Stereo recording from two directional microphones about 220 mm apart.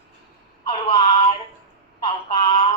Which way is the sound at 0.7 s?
20° left (ahead or behind).